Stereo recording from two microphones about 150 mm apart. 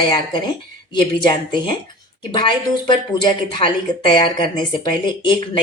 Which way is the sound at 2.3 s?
30° left (ahead or behind).